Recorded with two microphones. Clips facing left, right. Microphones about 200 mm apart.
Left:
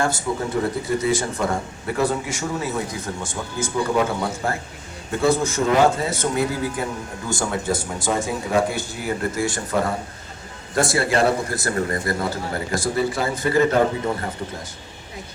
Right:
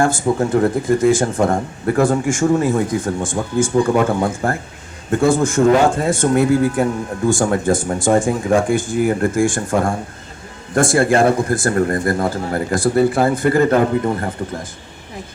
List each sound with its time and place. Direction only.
0.0 s speech: 50° right (ahead or behind)